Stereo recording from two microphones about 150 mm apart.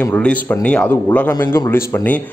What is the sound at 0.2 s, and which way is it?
Speech, 10° left (ahead or behind).